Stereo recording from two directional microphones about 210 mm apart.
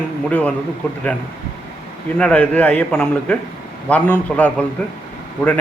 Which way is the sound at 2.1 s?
5° left (ahead or behind).